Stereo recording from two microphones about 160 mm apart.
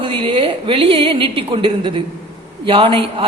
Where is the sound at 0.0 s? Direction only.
30° right (ahead or behind).